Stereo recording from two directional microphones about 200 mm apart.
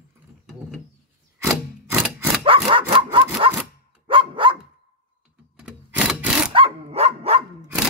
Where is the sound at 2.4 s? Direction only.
25° right (ahead or behind).